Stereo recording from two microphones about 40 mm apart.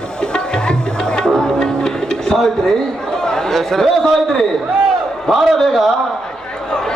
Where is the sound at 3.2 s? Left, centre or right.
Centre.